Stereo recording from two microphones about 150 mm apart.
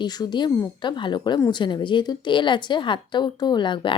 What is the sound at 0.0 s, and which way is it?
A woman's voice, 30° left (ahead or behind).